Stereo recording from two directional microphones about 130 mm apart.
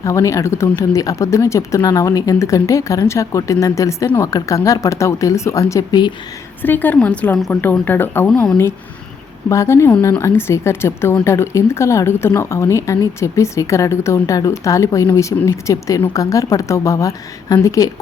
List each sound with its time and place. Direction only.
0.0 s speech: 25° left (ahead or behind)
6.6 s a woman's voice: 15° left (ahead or behind)
9.5 s speech: 20° left (ahead or behind)